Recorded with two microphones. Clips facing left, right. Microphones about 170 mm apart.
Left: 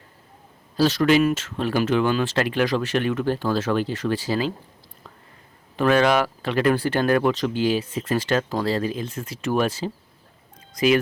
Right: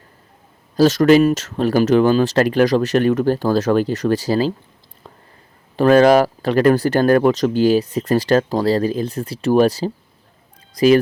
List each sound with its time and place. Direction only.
0.8 s speech: 45° right (ahead or behind)
5.7 s speech: 40° right (ahead or behind)